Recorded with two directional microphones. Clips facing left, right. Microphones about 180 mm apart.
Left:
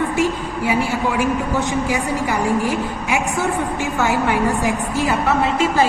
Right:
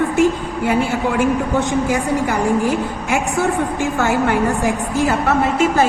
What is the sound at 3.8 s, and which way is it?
A woman's voice, 55° right (ahead or behind).